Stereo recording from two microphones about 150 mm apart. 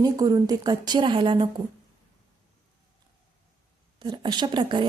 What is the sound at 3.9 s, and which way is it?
Speech, 30° right (ahead or behind).